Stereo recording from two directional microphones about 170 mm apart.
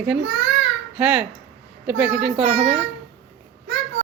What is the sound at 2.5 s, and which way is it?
Speech, 40° right (ahead or behind).